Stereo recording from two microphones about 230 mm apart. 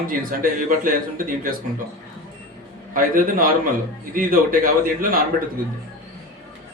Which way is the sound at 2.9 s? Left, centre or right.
Right.